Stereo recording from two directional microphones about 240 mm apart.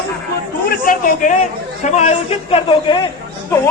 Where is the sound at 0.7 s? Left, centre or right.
Left.